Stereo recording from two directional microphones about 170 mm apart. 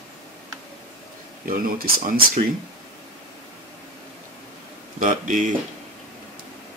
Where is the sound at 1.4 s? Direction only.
60° right (ahead or behind).